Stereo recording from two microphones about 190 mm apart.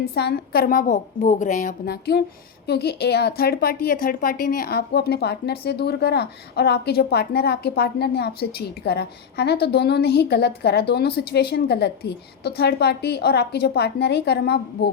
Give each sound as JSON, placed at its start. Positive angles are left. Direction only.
{"t": 0.0, "sound": "a woman's voice", "side_deg": 55}